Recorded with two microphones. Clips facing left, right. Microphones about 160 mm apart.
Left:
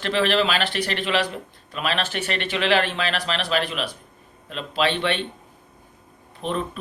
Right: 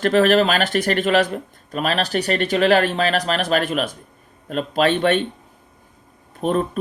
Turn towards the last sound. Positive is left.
turn(degrees=-45)  # may be behind; listen again after turning